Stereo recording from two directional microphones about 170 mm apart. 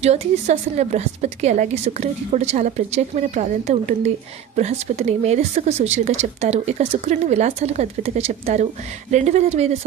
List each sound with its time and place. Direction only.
0.0 s a woman's voice: 40° right (ahead or behind)